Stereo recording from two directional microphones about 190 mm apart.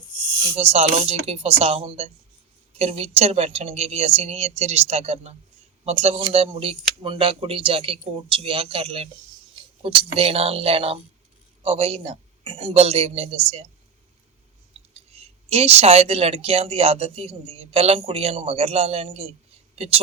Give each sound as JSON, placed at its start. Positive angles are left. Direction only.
{"t": 0.5, "sound": "speech", "side_deg": -35}
{"t": 14.7, "sound": "speech", "side_deg": -35}